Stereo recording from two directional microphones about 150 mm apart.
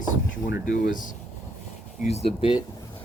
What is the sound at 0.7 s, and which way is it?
Speech, 65° left (ahead or behind).